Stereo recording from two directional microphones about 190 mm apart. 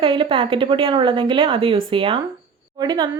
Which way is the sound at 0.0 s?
25° right (ahead or behind).